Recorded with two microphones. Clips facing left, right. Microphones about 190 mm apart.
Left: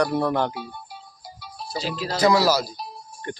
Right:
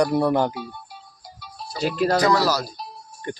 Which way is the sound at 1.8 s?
60° right (ahead or behind).